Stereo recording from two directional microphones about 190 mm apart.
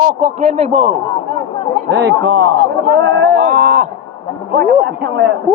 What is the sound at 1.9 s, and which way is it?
A man's voice, 65° right (ahead or behind).